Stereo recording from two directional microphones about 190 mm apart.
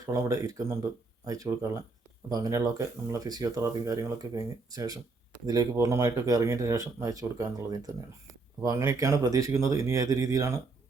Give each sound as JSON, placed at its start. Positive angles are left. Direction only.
{"t": 0.0, "sound": "speech", "side_deg": -15}